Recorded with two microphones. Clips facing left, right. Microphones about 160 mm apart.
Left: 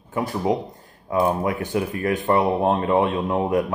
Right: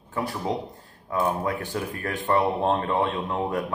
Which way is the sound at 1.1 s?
15° left (ahead or behind).